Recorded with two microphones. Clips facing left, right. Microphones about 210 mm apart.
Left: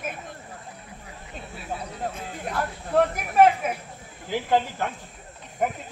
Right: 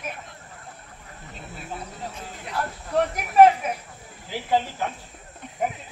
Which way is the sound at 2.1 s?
55° left (ahead or behind).